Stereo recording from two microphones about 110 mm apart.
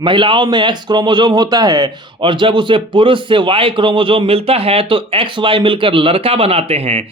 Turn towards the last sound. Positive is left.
turn(degrees=-70)  # may be behind; listen again after turning